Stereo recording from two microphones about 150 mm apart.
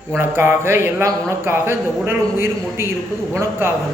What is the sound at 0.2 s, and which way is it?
A man's voice, 15° right (ahead or behind).